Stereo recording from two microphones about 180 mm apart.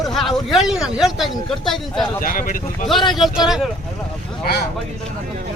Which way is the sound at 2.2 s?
50° left (ahead or behind).